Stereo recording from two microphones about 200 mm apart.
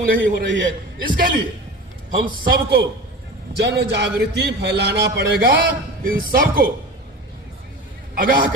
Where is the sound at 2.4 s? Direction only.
50° right (ahead or behind).